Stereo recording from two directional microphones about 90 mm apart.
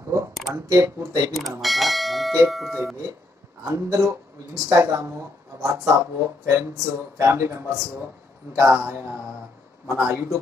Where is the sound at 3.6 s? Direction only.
35° right (ahead or behind).